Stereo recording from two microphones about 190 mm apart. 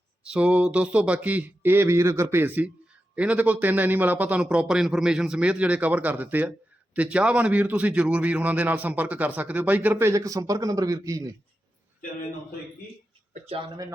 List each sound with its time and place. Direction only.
0.3 s a man's voice: 5° right (ahead or behind)
13.5 s speech: 25° right (ahead or behind)